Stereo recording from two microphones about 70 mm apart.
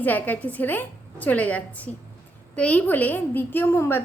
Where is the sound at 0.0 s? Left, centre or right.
Left.